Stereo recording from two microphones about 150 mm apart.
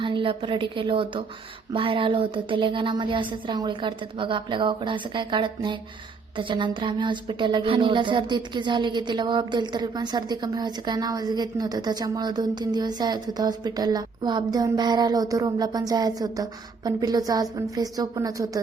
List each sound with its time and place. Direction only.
0.0 s a woman's voice: 35° right (ahead or behind)